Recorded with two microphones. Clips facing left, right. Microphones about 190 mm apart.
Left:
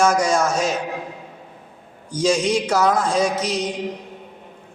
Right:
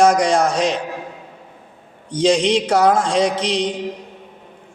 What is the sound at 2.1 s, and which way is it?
Speech, 30° right (ahead or behind).